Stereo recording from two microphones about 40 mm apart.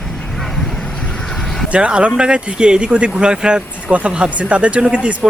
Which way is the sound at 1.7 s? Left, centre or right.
Right.